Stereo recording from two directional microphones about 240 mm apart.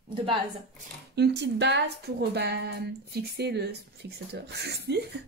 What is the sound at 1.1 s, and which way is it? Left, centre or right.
A woman's voice, right.